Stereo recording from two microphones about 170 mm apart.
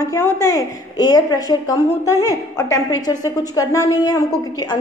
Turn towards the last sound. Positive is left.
turn(degrees=20)  # may be behind; listen again after turning